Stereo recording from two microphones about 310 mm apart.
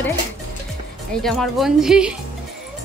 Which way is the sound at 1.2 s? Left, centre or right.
Centre.